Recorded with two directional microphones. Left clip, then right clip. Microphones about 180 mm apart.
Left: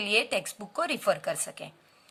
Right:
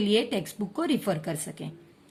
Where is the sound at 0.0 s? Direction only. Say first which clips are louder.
Right 1 dB; 25° left (ahead or behind).